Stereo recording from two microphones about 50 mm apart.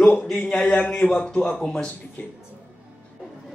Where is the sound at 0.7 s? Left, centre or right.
Left.